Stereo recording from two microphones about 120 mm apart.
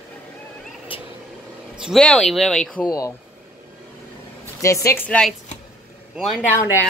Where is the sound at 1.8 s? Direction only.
Centre (ahead or behind).